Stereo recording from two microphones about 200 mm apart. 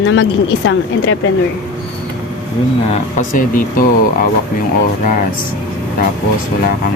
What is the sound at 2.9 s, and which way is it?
Speech, 40° left (ahead or behind).